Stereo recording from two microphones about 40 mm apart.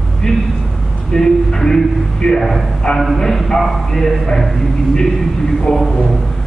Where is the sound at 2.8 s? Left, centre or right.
Centre.